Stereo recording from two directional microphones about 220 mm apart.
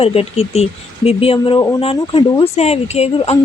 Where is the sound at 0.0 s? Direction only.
25° left (ahead or behind).